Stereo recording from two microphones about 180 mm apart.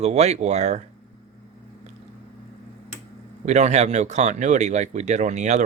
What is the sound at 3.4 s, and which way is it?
Speech, 40° right (ahead or behind).